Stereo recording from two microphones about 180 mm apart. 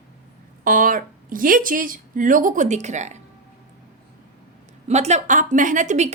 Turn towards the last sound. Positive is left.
turn(degrees=-45)  # may be behind; listen again after turning